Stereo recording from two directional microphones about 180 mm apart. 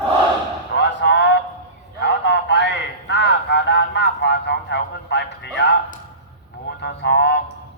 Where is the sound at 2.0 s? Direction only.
75° left (ahead or behind).